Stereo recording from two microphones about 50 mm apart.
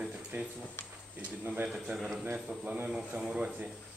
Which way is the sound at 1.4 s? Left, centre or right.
Right.